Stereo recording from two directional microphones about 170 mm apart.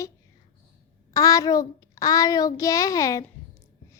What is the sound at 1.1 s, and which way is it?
A child's voice, 20° left (ahead or behind).